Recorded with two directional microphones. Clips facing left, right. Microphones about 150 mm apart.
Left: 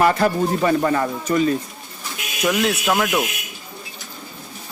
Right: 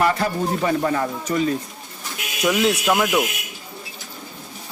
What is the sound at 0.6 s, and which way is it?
Speech, 65° left (ahead or behind).